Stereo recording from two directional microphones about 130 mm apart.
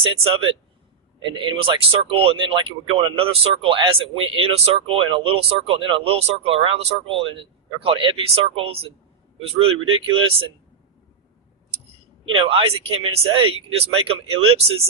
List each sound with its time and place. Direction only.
0.0 s speech: 40° right (ahead or behind)
12.4 s speech: 45° right (ahead or behind)